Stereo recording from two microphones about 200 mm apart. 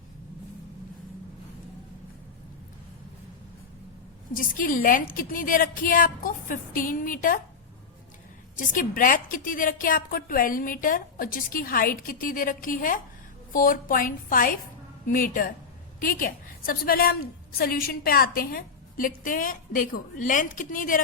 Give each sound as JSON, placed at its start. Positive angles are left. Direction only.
{"t": 4.4, "sound": "a woman's voice", "side_deg": 45}
{"t": 8.5, "sound": "a woman's voice", "side_deg": 40}